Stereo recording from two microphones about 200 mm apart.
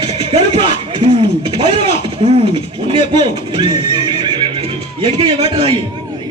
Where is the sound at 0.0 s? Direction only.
25° right (ahead or behind).